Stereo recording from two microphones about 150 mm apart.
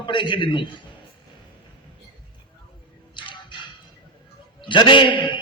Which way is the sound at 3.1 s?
30° left (ahead or behind).